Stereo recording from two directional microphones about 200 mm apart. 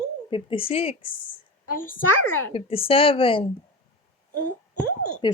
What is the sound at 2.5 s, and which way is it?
Speech, 25° left (ahead or behind).